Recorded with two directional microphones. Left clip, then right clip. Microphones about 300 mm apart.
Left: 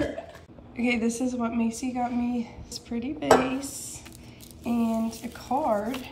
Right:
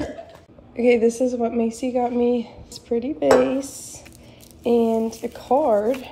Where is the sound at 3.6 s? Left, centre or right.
Left.